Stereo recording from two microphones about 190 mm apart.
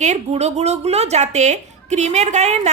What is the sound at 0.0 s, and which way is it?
Speech, 35° right (ahead or behind).